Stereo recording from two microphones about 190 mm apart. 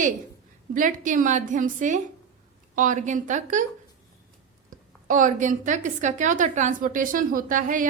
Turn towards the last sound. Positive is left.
turn(degrees=-45)  # may be behind; listen again after turning